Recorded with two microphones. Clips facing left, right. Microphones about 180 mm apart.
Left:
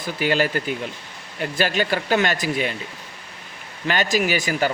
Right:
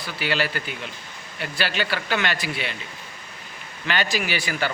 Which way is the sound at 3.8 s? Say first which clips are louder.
Left 5 dB; 45° left (ahead or behind).